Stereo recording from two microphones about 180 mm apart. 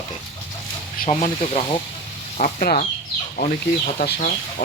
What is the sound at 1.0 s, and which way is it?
Speech, 40° left (ahead or behind).